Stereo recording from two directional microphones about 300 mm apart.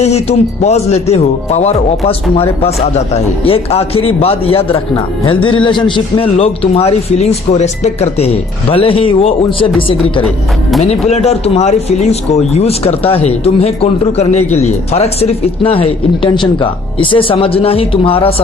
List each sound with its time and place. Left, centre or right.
0.0 s speech: left
10.2 s speech: centre
10.8 s speech: left